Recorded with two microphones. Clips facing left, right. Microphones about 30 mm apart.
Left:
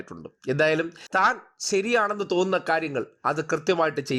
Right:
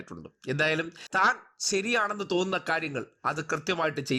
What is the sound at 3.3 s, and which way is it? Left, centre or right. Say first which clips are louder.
Speech: left 5 dB; left.